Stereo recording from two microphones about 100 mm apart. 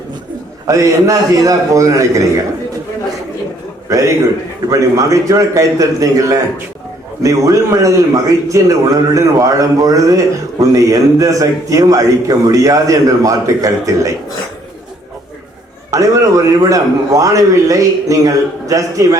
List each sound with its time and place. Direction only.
0.7 s a man's voice: 30° right (ahead or behind)
3.8 s a man's voice: 35° right (ahead or behind)
15.9 s a man's voice: 35° right (ahead or behind)